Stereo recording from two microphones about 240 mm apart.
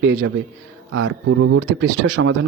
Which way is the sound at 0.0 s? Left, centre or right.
Right.